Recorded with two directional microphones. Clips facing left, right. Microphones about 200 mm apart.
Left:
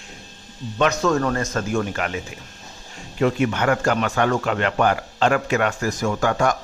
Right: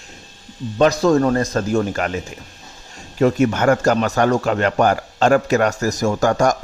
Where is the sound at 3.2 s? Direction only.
40° right (ahead or behind).